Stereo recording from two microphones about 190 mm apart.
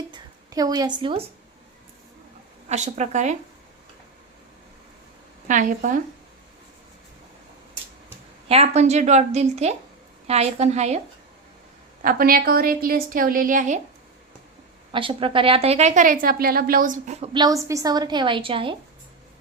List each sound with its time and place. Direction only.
0.1 s a sound: 20° right (ahead or behind)
2.6 s a woman's voice: 40° right (ahead or behind)
5.5 s a woman's voice: 40° right (ahead or behind)
8.4 s a woman's voice: 30° right (ahead or behind)
12.0 s a woman's voice: 50° right (ahead or behind)
14.9 s a woman's voice: 25° right (ahead or behind)
17.3 s a woman's voice: 20° right (ahead or behind)